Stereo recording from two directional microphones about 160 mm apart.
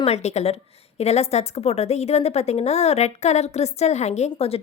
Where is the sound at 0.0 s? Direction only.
40° left (ahead or behind).